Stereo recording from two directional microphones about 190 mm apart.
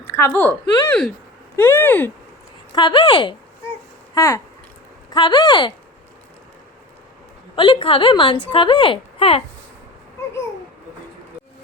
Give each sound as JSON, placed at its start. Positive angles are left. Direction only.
{"t": 0.1, "sound": "speech", "side_deg": 10}
{"t": 2.7, "sound": "speech", "side_deg": 25}
{"t": 7.5, "sound": "speech", "side_deg": 25}